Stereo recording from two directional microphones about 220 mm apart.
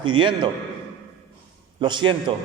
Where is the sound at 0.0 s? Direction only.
20° right (ahead or behind).